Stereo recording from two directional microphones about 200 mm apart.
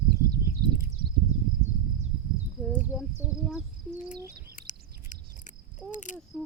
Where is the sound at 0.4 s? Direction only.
55° right (ahead or behind).